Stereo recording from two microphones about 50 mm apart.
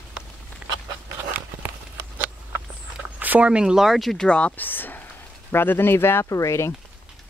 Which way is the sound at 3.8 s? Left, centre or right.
Centre.